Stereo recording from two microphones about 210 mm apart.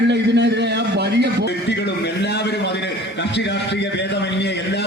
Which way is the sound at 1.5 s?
55° left (ahead or behind).